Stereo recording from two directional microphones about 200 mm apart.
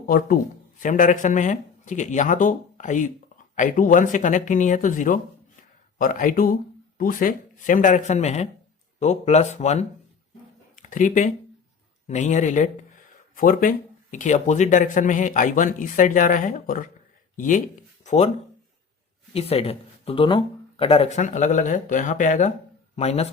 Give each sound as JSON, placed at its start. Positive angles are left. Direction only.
{"t": 0.8, "sound": "speech", "side_deg": 40}
{"t": 18.0, "sound": "a sound", "side_deg": 35}
{"t": 19.3, "sound": "speech", "side_deg": 30}